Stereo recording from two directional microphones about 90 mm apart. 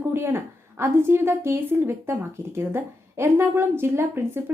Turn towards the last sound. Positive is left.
turn(degrees=-25)  # may be behind; listen again after turning